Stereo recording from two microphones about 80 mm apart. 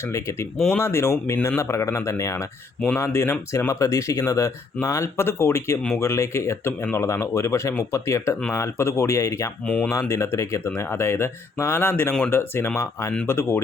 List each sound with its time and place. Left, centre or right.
0.8 s speech: left
9.6 s speech: centre
10.0 s speech: left